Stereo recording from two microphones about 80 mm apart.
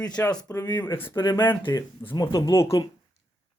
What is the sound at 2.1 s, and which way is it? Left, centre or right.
Throat clearing, left.